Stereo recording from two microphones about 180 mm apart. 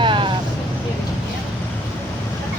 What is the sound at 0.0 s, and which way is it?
Vehicle, 30° right (ahead or behind).